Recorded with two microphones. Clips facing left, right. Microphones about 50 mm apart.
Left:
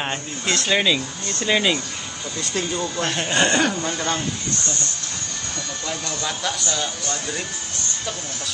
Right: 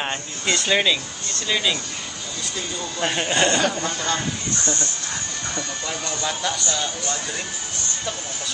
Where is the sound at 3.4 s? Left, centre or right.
Left.